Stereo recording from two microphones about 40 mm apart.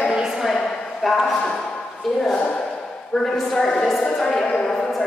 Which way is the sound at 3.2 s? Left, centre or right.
Centre.